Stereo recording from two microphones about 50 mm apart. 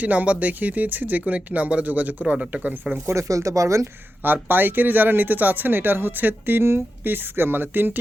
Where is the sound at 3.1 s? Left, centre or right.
Right.